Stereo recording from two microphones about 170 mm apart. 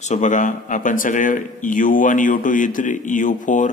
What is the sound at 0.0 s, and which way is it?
Speech, 45° left (ahead or behind).